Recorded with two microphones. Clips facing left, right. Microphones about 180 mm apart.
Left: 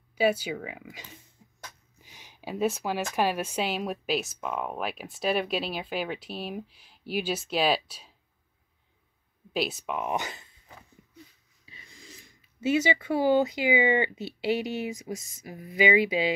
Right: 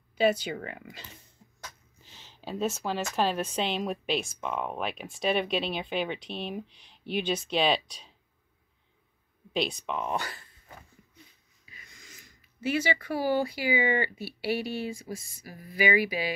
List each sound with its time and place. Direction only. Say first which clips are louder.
0.1 s a woman's voice: even; 10° left (ahead or behind)
9.5 s speech: even; 5° left (ahead or behind)
11.6 s speech: left 4 dB; 30° left (ahead or behind)